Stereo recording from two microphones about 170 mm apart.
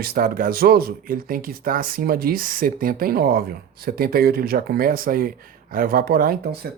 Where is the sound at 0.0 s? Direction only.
60° right (ahead or behind).